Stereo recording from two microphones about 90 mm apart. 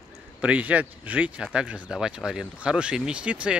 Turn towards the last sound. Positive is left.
turn(degrees=-10)  # may be behind; listen again after turning